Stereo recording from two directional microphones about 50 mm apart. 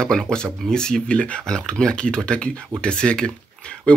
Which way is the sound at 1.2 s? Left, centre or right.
Left.